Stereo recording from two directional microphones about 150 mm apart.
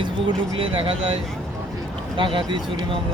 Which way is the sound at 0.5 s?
40° right (ahead or behind).